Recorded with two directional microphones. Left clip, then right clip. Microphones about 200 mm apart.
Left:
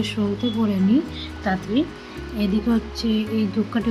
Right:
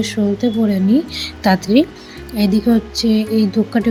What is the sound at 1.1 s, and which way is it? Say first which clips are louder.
Speech: right 9 dB; 40° right (ahead or behind).